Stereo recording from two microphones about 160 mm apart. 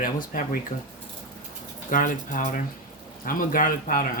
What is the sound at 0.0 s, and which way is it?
Speech, 60° left (ahead or behind).